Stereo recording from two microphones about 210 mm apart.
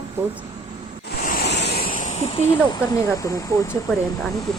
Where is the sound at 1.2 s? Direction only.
45° left (ahead or behind); by 2.8 s 25° left (ahead or behind).